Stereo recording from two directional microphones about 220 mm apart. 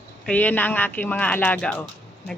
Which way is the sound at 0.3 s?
10° left (ahead or behind).